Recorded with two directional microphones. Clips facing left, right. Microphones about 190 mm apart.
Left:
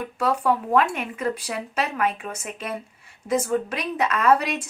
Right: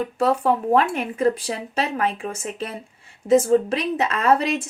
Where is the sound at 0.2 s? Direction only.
25° right (ahead or behind).